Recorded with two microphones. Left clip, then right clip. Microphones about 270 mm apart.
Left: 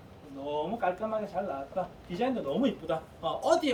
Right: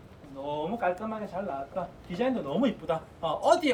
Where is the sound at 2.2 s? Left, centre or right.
Centre.